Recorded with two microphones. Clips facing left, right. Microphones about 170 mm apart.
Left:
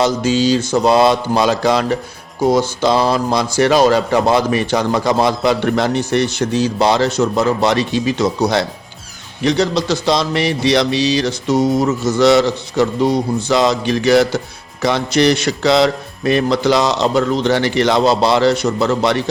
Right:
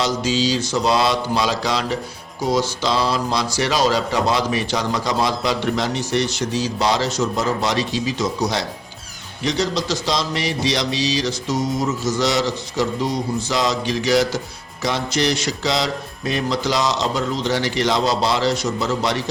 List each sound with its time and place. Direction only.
0.0 s mantra: 55° left (ahead or behind)
2.4 s a man's voice: 55° left (ahead or behind)